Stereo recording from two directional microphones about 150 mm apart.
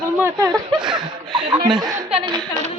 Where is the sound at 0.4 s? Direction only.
5° right (ahead or behind).